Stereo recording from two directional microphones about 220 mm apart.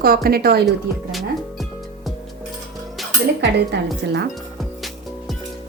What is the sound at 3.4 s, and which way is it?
Speech, 50° right (ahead or behind).